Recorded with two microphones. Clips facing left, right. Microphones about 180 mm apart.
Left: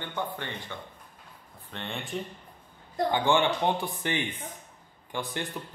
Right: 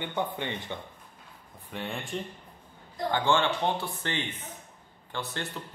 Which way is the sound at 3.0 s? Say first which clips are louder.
Left 1 dB; 15° left (ahead or behind).